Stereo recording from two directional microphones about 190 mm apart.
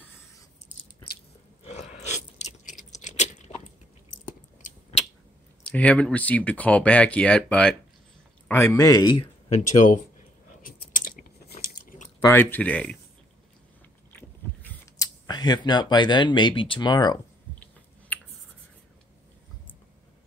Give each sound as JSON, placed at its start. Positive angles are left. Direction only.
{"t": 1.6, "sound": "chewing", "side_deg": 35}
{"t": 4.1, "sound": "biting", "side_deg": 40}
{"t": 4.6, "sound": "scissors", "side_deg": 40}
{"t": 5.6, "sound": "speech", "side_deg": 5}
{"t": 9.6, "sound": "speech", "side_deg": 40}
{"t": 10.6, "sound": "biting", "side_deg": 45}
{"t": 12.3, "sound": "speech", "side_deg": 10}
{"t": 14.1, "sound": "biting", "side_deg": 10}
{"t": 15.2, "sound": "speech", "side_deg": 20}